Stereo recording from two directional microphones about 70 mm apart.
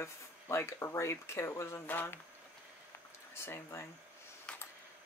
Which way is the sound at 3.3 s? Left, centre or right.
Left.